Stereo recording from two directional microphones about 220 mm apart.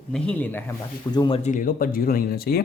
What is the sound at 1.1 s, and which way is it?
Speech, 20° left (ahead or behind).